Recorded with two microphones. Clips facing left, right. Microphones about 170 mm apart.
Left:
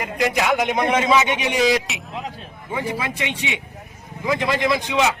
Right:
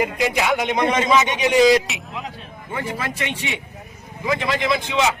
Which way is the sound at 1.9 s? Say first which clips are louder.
Even; centre (ahead or behind).